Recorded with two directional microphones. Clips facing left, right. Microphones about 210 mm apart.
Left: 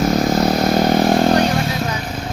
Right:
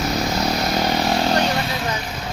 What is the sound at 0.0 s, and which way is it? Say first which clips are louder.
Vehicle: left 6 dB; 50° left (ahead or behind).